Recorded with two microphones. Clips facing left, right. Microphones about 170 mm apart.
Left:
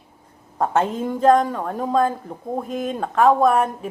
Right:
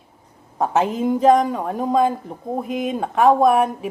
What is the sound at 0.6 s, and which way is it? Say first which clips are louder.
Speech: right 2 dB; 5° right (ahead or behind).